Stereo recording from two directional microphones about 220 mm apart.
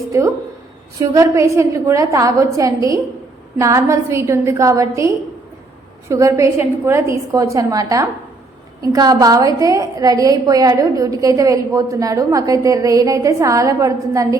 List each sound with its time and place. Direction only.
0.1 s a woman's voice: 15° right (ahead or behind)